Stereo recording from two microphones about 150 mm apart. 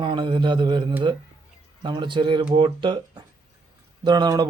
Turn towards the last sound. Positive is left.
turn(degrees=-25)  # may be behind; listen again after turning